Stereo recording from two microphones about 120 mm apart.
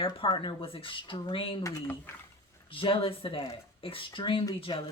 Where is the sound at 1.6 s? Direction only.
15° left (ahead or behind).